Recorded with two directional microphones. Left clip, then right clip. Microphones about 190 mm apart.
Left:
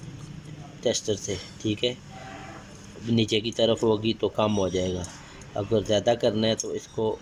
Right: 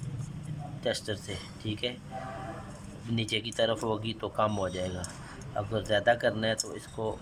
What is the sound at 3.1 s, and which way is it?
Speech, 20° left (ahead or behind).